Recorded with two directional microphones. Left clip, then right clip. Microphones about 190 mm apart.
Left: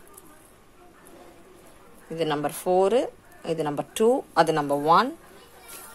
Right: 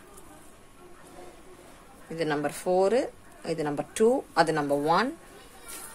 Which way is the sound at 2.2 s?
25° left (ahead or behind).